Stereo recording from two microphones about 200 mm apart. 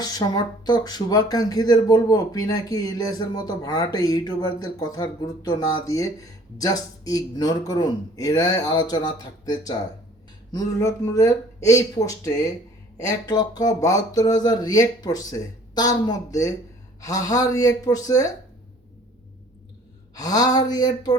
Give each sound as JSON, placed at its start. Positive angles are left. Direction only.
{"t": 0.0, "sound": "speech", "side_deg": 20}
{"t": 20.1, "sound": "speech", "side_deg": 20}